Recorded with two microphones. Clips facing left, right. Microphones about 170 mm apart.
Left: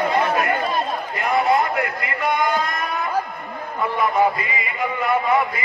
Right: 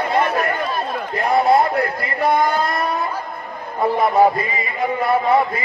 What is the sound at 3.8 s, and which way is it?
A man's voice, 35° right (ahead or behind).